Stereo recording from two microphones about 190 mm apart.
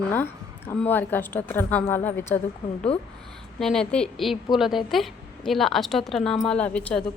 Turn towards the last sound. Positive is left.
turn(degrees=5)  # may be behind; listen again after turning